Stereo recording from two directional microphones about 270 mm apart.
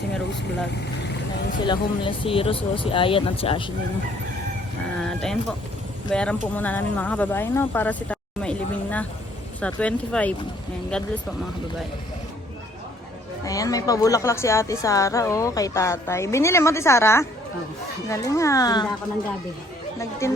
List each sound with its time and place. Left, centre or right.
1.6 s speech: centre
4.9 s speech: centre
13.4 s a woman's voice: centre
20.0 s a woman's voice: centre